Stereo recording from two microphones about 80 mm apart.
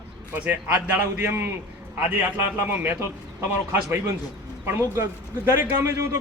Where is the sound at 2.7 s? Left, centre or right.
Right.